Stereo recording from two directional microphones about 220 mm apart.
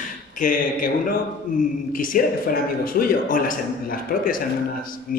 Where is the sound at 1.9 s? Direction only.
40° left (ahead or behind).